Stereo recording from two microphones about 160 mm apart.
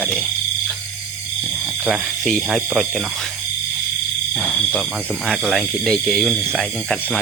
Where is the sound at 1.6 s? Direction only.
Centre (ahead or behind).